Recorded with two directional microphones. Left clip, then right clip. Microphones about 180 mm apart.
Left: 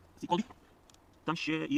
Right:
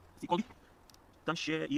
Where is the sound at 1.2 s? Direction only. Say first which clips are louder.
Left 1 dB; 10° right (ahead or behind).